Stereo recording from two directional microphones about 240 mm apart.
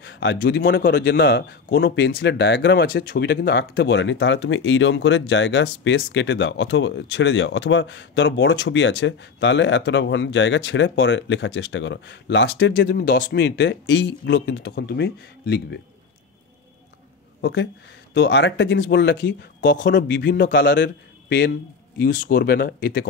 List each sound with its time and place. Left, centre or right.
0.0 s a man's voice: left
17.4 s a man's voice: left